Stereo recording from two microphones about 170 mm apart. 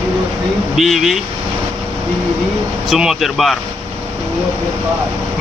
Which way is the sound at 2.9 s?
Centre (ahead or behind).